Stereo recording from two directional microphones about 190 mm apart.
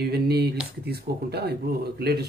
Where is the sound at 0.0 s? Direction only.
55° right (ahead or behind).